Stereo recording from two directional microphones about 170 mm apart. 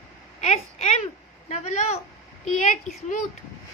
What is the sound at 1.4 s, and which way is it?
A woman's voice, 40° left (ahead or behind).